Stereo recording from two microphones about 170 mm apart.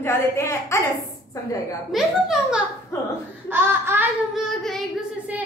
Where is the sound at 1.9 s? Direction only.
5° right (ahead or behind).